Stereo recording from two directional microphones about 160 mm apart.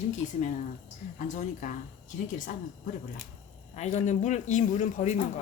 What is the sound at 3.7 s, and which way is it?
Speech, 45° left (ahead or behind).